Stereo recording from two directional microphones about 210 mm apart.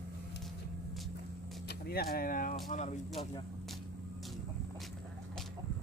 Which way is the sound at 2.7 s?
35° left (ahead or behind).